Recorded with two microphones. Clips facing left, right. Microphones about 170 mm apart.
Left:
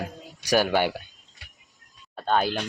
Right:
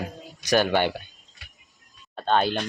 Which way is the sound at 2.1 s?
5° left (ahead or behind).